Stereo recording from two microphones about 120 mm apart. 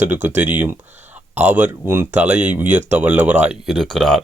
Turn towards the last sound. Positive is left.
turn(degrees=0)  # may be behind; listen again after turning